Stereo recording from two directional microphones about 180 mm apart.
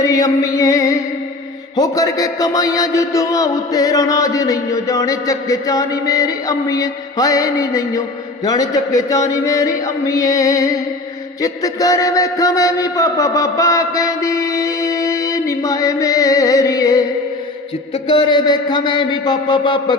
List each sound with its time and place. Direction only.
0.0 s music: 20° left (ahead or behind)
1.7 s a man's voice: 20° left (ahead or behind)
18.1 s a man's voice: 25° left (ahead or behind)